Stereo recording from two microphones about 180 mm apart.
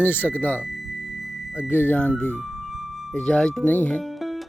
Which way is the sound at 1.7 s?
10° left (ahead or behind).